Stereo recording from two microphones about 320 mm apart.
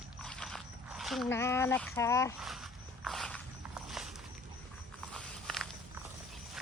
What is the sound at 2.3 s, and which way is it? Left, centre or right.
Walk, centre.